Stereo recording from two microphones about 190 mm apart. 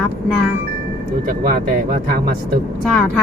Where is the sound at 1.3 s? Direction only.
45° right (ahead or behind).